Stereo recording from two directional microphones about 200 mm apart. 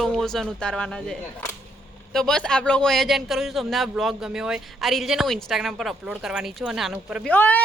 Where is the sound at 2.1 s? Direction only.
5° left (ahead or behind).